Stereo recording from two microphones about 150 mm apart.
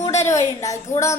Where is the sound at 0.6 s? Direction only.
20° left (ahead or behind).